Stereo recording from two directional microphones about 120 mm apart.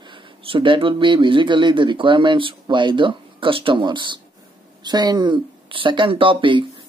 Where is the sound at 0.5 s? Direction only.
45° right (ahead or behind).